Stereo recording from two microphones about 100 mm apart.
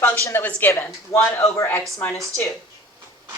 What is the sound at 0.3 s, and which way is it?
A woman's voice, 25° left (ahead or behind).